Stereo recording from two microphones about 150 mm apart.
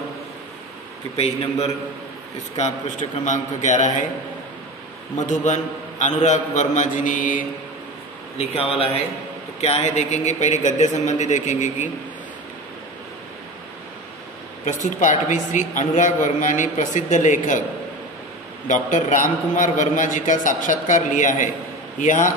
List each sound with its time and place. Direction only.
1.1 s a man's voice: 45° left (ahead or behind)
5.1 s a man's voice: 55° left (ahead or behind)
8.7 s a man's voice: 40° left (ahead or behind)
14.6 s a woman's voice: 55° left (ahead or behind)
18.7 s a woman's voice: 55° left (ahead or behind)